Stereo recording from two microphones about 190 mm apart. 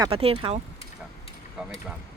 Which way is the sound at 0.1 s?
30° right (ahead or behind).